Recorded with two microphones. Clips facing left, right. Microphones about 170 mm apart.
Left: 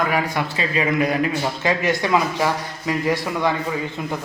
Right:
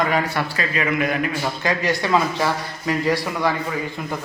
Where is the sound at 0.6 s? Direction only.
30° left (ahead or behind).